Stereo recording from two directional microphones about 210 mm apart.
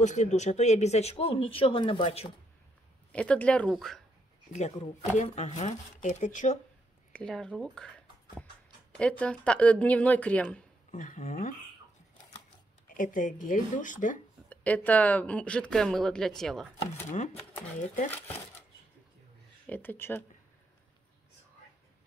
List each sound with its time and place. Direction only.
0.0 s speech: 35° left (ahead or behind)
3.1 s speech: 5° left (ahead or behind)
4.5 s speech: 35° left (ahead or behind)
7.1 s speech: 5° left (ahead or behind)
10.9 s speech: 40° left (ahead or behind)
12.8 s speech: 40° left (ahead or behind)
14.5 s speech: 5° left (ahead or behind)
17.1 s speech: 35° left (ahead or behind)
19.6 s speech: 10° left (ahead or behind)